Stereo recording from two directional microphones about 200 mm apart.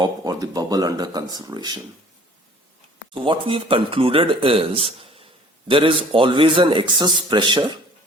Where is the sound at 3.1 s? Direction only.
25° right (ahead or behind).